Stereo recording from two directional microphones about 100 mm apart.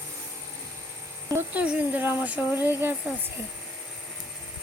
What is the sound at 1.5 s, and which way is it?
Speech, 15° right (ahead or behind).